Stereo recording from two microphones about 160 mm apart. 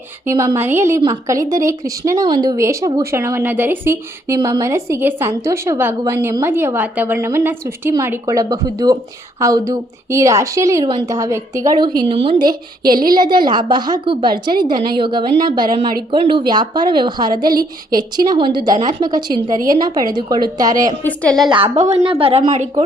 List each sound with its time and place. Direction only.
0.3 s a woman's voice: 20° right (ahead or behind)
12.0 s speech: 35° right (ahead or behind)
12.9 s a woman's voice: 65° right (ahead or behind)
13.1 s a woman's voice: 25° right (ahead or behind)
21.0 s a woman's voice: 10° left (ahead or behind)
21.4 s speech: 30° right (ahead or behind)
21.8 s a woman's voice: 45° right (ahead or behind)